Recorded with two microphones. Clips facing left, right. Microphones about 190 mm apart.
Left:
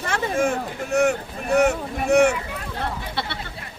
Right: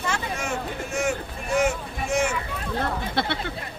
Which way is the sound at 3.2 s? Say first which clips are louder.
Right 4 dB; 50° right (ahead or behind).